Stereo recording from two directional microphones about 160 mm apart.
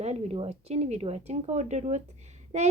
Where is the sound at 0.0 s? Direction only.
40° right (ahead or behind).